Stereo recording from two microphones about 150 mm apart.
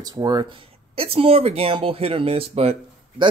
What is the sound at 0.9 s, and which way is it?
Speech, 40° right (ahead or behind).